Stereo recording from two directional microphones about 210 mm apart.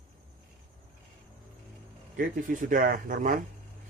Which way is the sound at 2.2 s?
40° right (ahead or behind).